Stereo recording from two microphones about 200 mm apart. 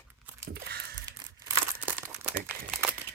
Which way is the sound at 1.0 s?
15° right (ahead or behind).